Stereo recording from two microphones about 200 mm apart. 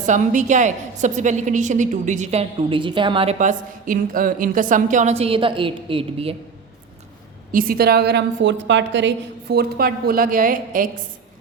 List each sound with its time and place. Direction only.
0.0 s a woman's voice: 40° right (ahead or behind)
3.3 s a woman's voice: 40° right (ahead or behind)
7.5 s a woman's voice: 50° right (ahead or behind)